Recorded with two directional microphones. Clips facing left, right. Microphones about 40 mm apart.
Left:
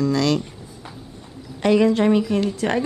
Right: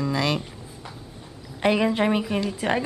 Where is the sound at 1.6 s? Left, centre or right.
Centre.